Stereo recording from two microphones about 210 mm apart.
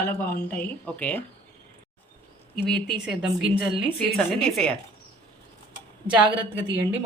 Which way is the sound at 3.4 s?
25° right (ahead or behind).